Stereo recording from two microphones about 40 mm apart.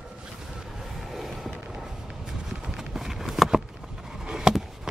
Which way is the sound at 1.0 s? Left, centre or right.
Centre.